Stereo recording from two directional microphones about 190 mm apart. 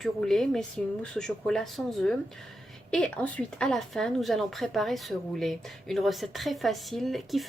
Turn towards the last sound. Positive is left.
turn(degrees=0)  # may be behind; listen again after turning